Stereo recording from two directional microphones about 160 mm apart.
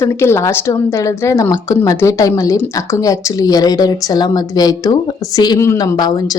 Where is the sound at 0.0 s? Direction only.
15° left (ahead or behind).